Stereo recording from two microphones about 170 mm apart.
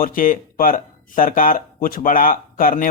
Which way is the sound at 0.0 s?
55° left (ahead or behind).